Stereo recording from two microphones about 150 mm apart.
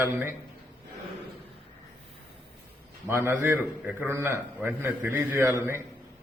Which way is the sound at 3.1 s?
15° right (ahead or behind).